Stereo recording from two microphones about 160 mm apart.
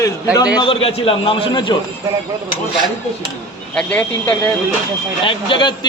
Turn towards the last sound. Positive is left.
turn(degrees=30)  # may be behind; listen again after turning